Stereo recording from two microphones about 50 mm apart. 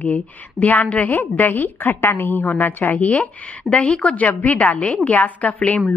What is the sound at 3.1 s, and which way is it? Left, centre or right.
A woman's voice, left.